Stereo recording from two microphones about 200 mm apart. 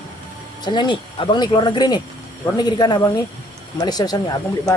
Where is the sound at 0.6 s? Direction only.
25° left (ahead or behind).